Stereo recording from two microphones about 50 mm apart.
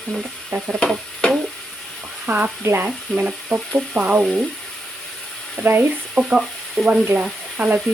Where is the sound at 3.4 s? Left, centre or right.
Right.